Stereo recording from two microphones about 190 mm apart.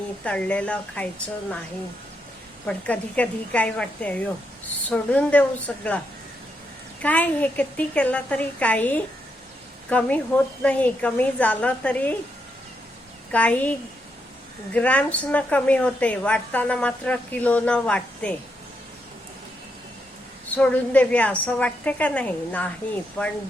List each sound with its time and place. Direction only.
0.3 s a woman's voice: 5° left (ahead or behind)
2.6 s a woman's voice: 10° left (ahead or behind)
7.0 s a woman's voice: 10° left (ahead or behind)
13.3 s a woman's voice: 10° left (ahead or behind)
20.6 s a woman's voice: 5° left (ahead or behind)